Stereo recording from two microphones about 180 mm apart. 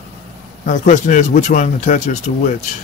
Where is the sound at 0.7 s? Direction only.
45° left (ahead or behind).